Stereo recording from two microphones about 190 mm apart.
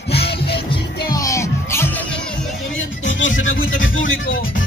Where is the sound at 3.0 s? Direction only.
80° left.